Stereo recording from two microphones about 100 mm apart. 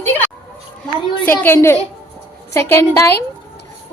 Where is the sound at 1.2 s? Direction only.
20° left (ahead or behind).